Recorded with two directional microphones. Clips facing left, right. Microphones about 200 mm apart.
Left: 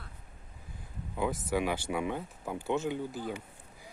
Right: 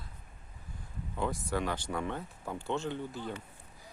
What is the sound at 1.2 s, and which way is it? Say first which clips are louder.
Speech: left 3 dB; 5° left (ahead or behind).